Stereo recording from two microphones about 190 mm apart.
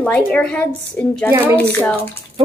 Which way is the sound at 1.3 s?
10° right (ahead or behind).